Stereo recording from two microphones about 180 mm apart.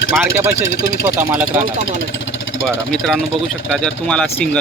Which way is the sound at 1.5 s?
10° right (ahead or behind).